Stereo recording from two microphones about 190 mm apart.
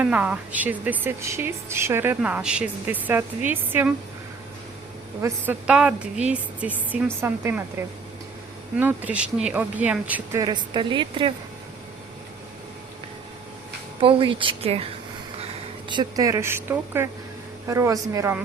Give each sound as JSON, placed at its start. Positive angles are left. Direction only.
{"t": 0.0, "sound": "a woman's voice", "side_deg": -5}
{"t": 5.2, "sound": "a woman's voice", "side_deg": -10}
{"t": 10.4, "sound": "a woman's voice", "side_deg": -25}
{"t": 14.0, "sound": "a woman's voice", "side_deg": -25}
{"t": 15.9, "sound": "a woman's voice", "side_deg": -20}